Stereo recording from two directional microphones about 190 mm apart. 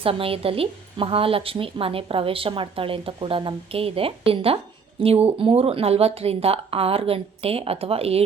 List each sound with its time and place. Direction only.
0.0 s a woman's voice: 30° right (ahead or behind)